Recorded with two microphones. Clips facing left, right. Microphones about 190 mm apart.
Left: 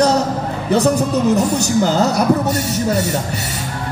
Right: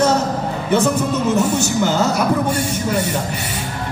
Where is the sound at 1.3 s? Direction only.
40° left (ahead or behind).